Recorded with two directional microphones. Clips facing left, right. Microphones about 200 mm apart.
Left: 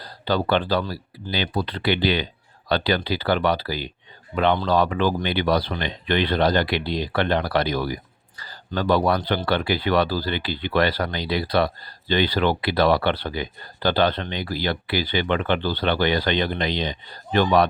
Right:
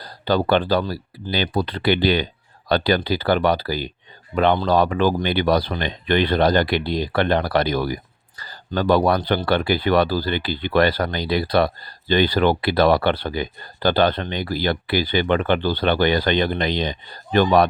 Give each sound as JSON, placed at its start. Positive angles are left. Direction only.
{"t": 0.0, "sound": "speech", "side_deg": -45}